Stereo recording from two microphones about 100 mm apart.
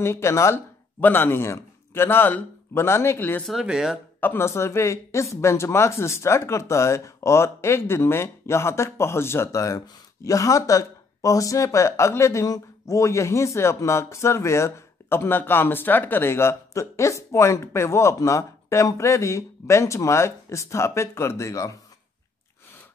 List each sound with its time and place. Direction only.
0.0 s speech: 25° left (ahead or behind)
3.4 s speech: 5° right (ahead or behind)
4.2 s speech: 20° left (ahead or behind)